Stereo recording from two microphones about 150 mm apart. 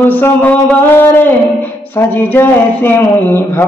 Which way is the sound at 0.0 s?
15° left (ahead or behind).